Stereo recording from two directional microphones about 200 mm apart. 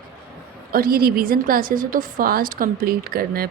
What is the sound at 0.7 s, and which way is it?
A woman's voice, 50° right (ahead or behind).